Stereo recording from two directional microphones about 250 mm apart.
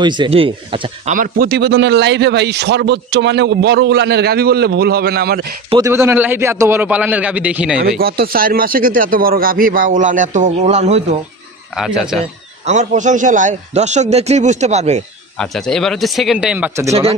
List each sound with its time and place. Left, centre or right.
0.0 s a man's voice: centre
1.0 s a man's voice: right
5.7 s a man's voice: centre
8.0 s a man's voice: right
11.8 s speech: centre
12.6 s a man's voice: right
15.3 s speech: centre